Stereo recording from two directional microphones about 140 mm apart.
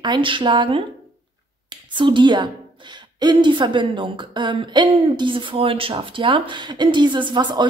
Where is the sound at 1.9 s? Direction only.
35° right (ahead or behind).